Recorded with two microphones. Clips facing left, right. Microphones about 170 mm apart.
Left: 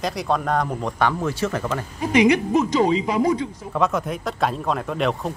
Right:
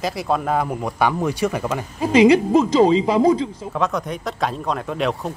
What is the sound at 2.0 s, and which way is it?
A woman's voice, 30° right (ahead or behind).